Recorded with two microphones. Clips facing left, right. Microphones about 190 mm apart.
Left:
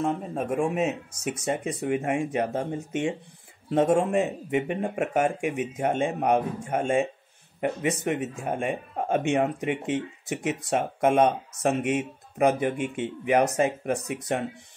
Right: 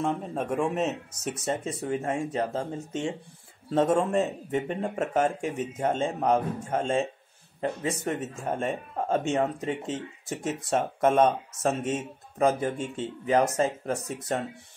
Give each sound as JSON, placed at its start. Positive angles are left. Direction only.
{"t": 0.0, "sound": "speech", "side_deg": 0}